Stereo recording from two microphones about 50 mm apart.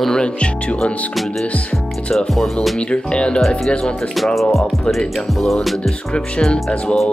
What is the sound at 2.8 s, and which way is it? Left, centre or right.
Speech, centre.